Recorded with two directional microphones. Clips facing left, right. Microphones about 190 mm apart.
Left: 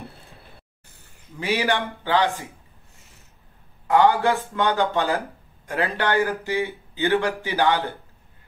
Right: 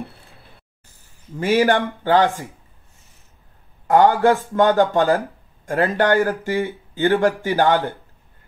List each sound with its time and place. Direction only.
1.4 s speech: 45° right (ahead or behind)
3.8 s a man's voice: 45° right (ahead or behind)